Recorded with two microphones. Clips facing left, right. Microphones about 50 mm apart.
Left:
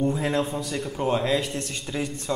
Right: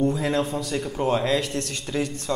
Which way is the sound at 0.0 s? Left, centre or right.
Left.